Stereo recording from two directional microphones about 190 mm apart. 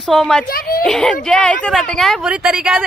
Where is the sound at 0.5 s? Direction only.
50° left (ahead or behind).